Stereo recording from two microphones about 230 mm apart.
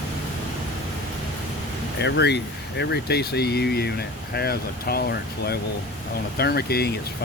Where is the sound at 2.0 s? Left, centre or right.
Left.